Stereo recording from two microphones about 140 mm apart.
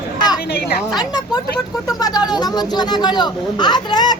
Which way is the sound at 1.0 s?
30° left (ahead or behind).